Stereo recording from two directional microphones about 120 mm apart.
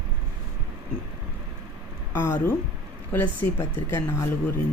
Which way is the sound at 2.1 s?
20° left (ahead or behind).